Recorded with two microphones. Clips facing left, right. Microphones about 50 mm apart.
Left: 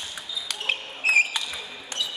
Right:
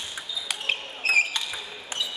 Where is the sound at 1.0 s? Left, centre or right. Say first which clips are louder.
Left 2 dB; centre.